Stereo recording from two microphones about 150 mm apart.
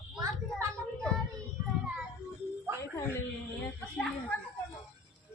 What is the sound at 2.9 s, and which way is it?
Speech, 20° left (ahead or behind).